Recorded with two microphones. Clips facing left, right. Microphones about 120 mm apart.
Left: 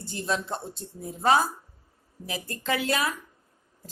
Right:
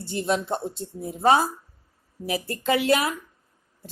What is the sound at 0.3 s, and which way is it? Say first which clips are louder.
Speech: right 4 dB; 25° right (ahead or behind).